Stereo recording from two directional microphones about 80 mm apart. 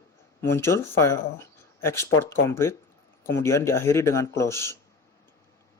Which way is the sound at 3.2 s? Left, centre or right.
Left.